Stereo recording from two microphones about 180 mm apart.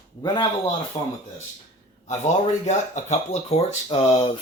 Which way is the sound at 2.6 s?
40° left (ahead or behind).